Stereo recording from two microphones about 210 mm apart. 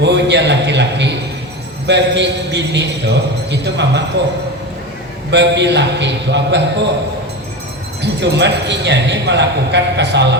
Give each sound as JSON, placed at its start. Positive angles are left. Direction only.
{"t": 0.0, "sound": "a man's voice", "side_deg": -55}
{"t": 5.3, "sound": "a man's voice", "side_deg": -55}
{"t": 8.0, "sound": "a man's voice", "side_deg": -55}